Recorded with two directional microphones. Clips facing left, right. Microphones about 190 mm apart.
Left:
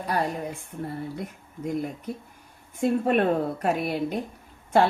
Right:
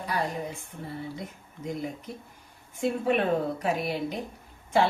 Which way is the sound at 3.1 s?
50° left (ahead or behind).